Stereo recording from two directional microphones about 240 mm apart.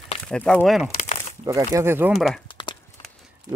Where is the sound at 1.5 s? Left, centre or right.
Centre.